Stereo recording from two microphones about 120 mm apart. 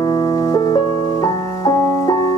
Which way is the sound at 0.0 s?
40° left (ahead or behind).